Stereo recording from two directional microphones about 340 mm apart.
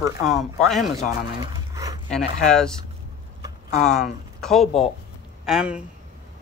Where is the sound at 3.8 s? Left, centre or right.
Centre.